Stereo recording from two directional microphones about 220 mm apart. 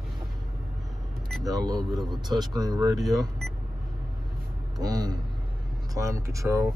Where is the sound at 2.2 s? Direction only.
20° right (ahead or behind).